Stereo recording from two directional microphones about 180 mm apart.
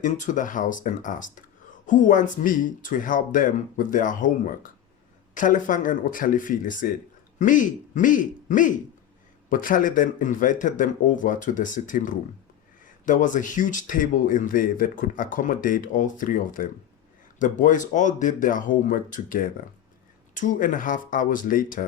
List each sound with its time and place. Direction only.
0.0 s speech: 45° left (ahead or behind)